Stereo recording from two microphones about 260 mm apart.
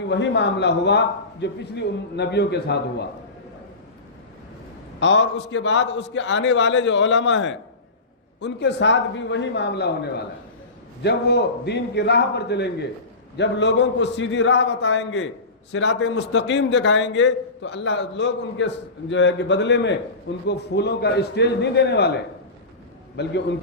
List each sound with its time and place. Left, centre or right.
0.1 s a man's voice: left
4.9 s a man's voice: left
11.0 s a man's voice: left
23.1 s a man's voice: left